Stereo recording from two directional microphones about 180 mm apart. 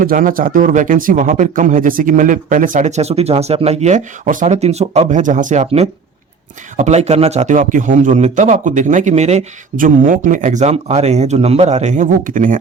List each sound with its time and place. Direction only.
0.0 s a man's voice: 50° right (ahead or behind)